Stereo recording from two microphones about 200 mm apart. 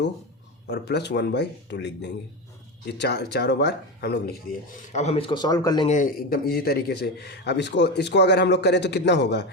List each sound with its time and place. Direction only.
0.7 s a man's voice: 55° left (ahead or behind)
4.9 s speech: 35° left (ahead or behind)
5.9 s a man's voice: 45° left (ahead or behind)